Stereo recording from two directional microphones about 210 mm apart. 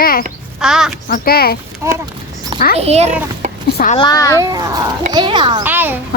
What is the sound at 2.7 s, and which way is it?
Speech, 30° right (ahead or behind).